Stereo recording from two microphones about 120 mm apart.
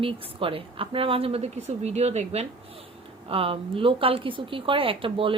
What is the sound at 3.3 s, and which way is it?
A woman's voice, 50° right (ahead or behind).